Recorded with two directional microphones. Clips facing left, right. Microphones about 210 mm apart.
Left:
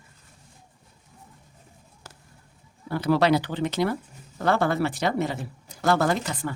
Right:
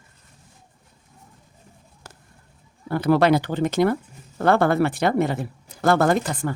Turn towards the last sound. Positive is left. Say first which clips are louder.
# right 5 dB
turn(degrees=-45)  # may be behind; listen again after turning